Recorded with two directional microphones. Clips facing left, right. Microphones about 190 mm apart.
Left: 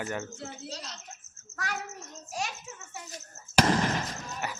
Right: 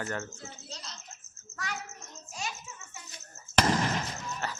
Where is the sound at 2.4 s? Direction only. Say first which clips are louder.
Left 3 dB; 65° left (ahead or behind).